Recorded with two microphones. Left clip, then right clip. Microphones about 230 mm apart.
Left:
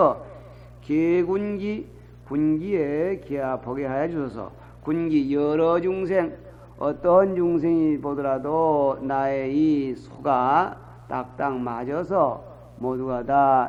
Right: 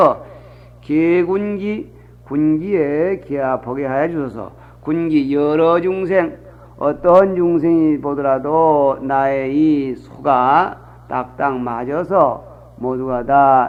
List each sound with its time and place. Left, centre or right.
0.0 s a man's voice: left
0.9 s a sound: left
2.3 s a man's voice: left
6.7 s a man's voice: left